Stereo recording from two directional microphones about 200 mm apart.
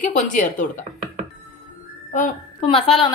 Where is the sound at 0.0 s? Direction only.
40° left (ahead or behind).